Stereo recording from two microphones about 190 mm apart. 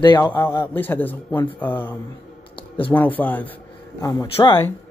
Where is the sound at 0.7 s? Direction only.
10° left (ahead or behind).